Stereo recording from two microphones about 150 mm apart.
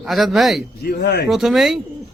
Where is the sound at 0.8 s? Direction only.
90° left.